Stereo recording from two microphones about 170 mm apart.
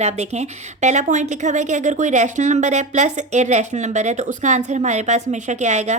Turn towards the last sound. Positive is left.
turn(degrees=-45)  # may be behind; listen again after turning